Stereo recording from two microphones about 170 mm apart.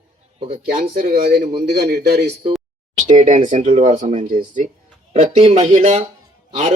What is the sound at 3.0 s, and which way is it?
Speech, 45° right (ahead or behind).